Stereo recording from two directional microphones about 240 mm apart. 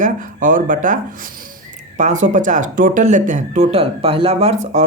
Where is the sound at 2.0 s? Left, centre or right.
Right.